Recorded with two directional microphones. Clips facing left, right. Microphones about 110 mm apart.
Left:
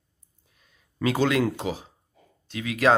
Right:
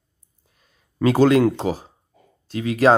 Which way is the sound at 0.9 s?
40° right (ahead or behind).